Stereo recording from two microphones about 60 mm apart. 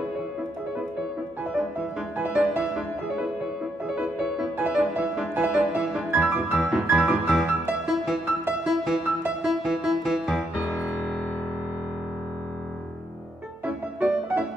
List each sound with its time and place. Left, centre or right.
2.1 s music: centre
4.0 s music: centre
5.6 s music: centre
13.7 s music: centre